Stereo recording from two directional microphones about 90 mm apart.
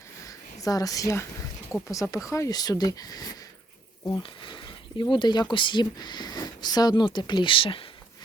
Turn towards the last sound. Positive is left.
turn(degrees=80)